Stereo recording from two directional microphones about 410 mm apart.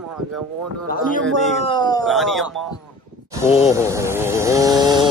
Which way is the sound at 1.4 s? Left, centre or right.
Centre.